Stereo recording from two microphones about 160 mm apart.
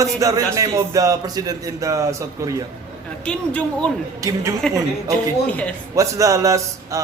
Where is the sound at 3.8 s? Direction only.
5° left (ahead or behind).